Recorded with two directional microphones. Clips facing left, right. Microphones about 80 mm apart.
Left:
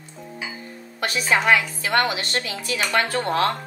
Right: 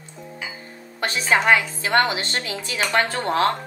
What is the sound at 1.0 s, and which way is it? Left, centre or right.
A woman's voice, right.